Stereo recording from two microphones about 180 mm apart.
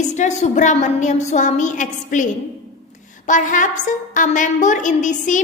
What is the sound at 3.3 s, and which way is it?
A woman's voice, 45° left (ahead or behind).